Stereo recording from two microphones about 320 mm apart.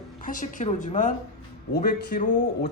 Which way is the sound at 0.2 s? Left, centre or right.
Left.